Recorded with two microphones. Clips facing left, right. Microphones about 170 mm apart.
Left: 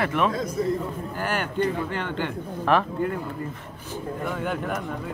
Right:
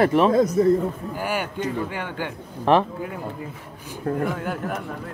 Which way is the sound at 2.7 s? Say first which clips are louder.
Right 4 dB; 30° right (ahead or behind).